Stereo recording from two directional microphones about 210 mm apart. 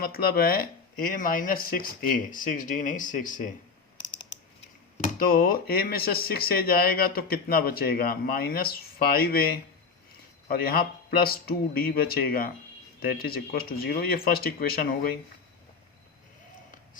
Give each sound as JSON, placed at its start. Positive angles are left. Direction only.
{"t": 0.0, "sound": "speech", "side_deg": 45}
{"t": 4.9, "sound": "speech", "side_deg": 40}
{"t": 10.5, "sound": "speech", "side_deg": 45}